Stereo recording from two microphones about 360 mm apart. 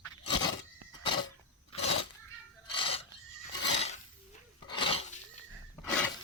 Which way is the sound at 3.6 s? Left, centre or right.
Left.